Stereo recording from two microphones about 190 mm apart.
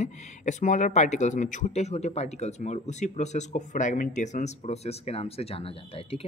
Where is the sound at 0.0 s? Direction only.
40° left (ahead or behind).